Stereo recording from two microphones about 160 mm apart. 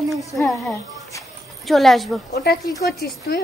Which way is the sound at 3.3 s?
80° left.